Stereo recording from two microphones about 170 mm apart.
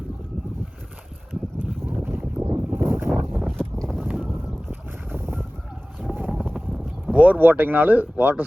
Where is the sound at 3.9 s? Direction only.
10° right (ahead or behind).